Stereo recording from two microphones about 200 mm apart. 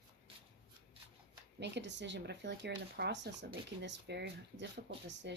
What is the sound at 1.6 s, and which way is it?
Speech, 60° right (ahead or behind).